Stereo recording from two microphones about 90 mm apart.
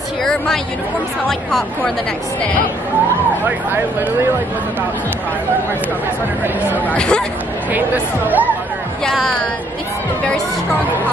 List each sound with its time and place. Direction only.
0.2 s a woman's voice: 5° left (ahead or behind)
3.4 s speech: 25° right (ahead or behind)
6.9 s speech: 10° left (ahead or behind)
7.7 s speech: 20° right (ahead or behind)
9.0 s speech: centre (ahead or behind)